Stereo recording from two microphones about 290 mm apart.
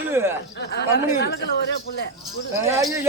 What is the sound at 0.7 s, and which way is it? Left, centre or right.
Speech, left.